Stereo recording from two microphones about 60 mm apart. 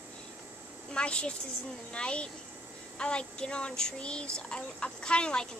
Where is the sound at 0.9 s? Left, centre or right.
Centre.